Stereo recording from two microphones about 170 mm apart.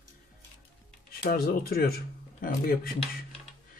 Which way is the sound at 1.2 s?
60° left (ahead or behind).